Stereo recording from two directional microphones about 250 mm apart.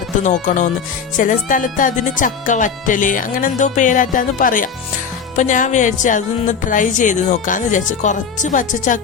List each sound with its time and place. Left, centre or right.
0.2 s speech: left